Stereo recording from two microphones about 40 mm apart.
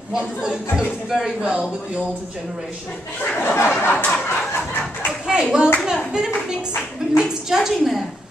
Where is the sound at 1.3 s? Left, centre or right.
Centre.